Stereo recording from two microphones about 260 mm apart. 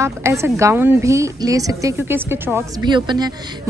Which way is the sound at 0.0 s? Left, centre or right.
Centre.